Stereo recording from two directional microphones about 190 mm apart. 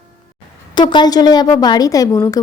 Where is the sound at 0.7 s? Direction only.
25° left (ahead or behind).